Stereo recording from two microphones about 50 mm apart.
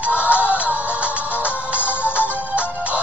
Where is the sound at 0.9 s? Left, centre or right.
Right.